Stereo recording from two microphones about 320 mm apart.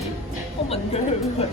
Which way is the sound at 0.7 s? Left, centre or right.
Centre.